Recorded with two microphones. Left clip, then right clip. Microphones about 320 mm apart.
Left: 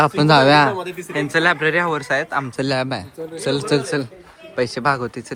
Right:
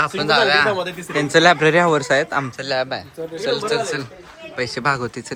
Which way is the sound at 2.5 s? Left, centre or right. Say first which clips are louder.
Left 1 dB; centre.